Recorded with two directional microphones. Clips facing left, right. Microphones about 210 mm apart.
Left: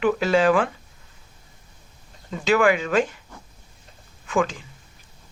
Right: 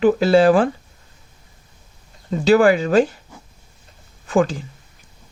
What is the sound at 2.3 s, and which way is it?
Speech, 35° right (ahead or behind).